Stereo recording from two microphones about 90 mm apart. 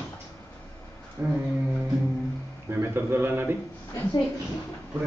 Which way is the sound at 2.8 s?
25° right (ahead or behind).